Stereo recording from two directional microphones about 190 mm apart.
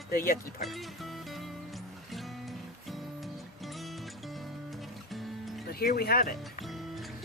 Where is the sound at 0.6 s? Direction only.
Centre (ahead or behind).